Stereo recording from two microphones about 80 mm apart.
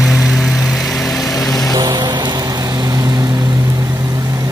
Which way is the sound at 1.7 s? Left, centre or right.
Right.